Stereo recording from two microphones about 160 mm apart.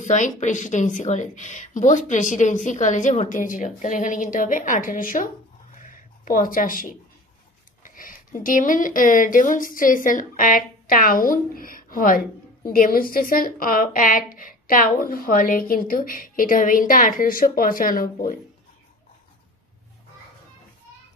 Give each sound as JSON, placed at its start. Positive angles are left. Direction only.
{"t": 0.0, "sound": "speech", "side_deg": 50}
{"t": 5.8, "sound": "a sound", "side_deg": 55}
{"t": 7.8, "sound": "speech", "side_deg": 60}